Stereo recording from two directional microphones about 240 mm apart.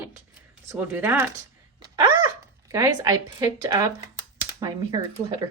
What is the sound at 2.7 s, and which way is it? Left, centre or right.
A woman's voice, centre.